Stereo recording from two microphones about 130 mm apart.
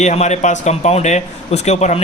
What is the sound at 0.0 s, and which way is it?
A man's voice, 60° left (ahead or behind).